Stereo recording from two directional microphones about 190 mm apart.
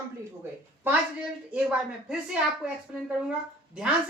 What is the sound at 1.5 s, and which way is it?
A woman's voice, 5° right (ahead or behind).